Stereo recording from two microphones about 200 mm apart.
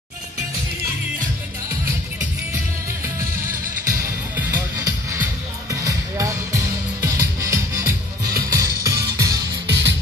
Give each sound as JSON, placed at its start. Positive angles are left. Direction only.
{"t": 4.4, "sound": "music", "side_deg": -10}
{"t": 9.7, "sound": "music", "side_deg": -65}